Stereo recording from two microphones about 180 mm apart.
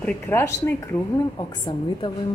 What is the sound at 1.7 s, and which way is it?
Speech, 25° left (ahead or behind).